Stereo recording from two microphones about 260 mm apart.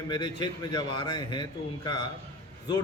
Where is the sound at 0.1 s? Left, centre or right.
Centre.